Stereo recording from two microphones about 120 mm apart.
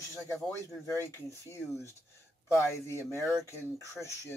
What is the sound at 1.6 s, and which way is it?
Speech, 5° right (ahead or behind).